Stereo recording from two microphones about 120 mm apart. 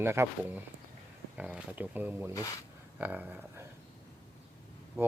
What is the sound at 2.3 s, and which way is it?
Speech, 25° left (ahead or behind).